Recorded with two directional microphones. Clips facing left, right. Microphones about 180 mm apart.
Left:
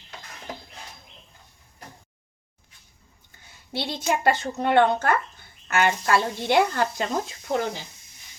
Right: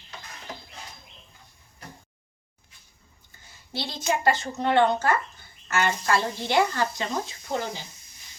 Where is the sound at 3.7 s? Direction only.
60° left (ahead or behind).